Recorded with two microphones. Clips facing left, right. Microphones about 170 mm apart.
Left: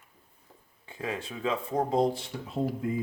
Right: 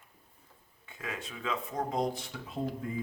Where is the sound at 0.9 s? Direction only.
30° left (ahead or behind).